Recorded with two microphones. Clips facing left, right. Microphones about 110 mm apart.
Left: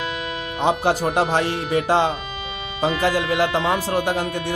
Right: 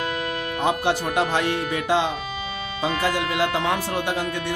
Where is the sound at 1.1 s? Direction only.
35° left (ahead or behind).